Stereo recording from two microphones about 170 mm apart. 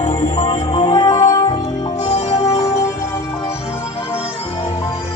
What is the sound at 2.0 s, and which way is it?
Music, 40° left (ahead or behind).